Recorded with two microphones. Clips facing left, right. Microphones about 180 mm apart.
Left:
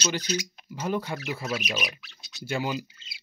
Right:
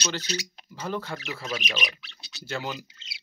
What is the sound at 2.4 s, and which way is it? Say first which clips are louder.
Speech: left 3 dB; 10° left (ahead or behind).